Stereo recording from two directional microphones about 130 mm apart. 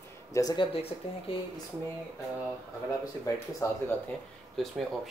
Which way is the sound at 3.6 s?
25° left (ahead or behind).